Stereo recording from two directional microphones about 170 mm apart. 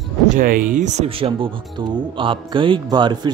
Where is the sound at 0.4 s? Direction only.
50° right (ahead or behind).